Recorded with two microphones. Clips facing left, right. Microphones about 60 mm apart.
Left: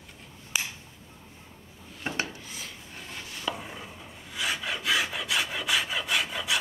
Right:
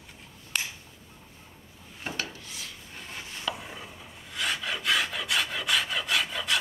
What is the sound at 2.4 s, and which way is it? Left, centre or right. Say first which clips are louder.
Filing: left 1 dB; centre.